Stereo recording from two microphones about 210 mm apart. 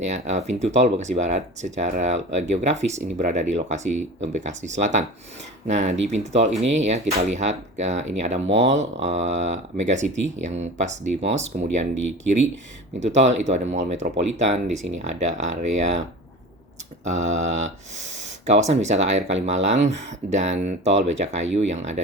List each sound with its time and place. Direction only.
0.0 s speech: 35° right (ahead or behind)
8.4 s speech: 60° right (ahead or behind)
9.0 s speech: 35° right (ahead or behind)
13.0 s speech: 35° right (ahead or behind)
17.0 s speech: 35° right (ahead or behind)